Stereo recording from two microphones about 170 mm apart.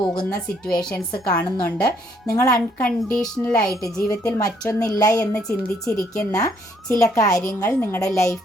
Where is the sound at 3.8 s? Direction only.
20° left (ahead or behind).